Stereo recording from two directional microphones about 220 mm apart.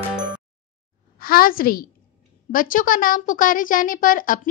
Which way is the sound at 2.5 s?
40° left (ahead or behind).